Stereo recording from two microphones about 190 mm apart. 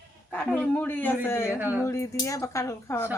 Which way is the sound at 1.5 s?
10° right (ahead or behind).